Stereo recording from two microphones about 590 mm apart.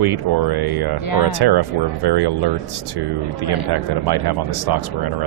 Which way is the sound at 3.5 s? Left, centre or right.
Right.